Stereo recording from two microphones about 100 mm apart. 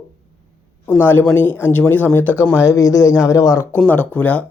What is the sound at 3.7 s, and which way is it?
Speech, 15° left (ahead or behind).